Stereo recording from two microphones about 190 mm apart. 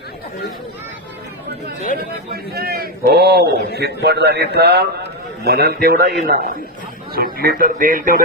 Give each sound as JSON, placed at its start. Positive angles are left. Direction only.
{"t": 2.3, "sound": "a man's voice", "side_deg": -55}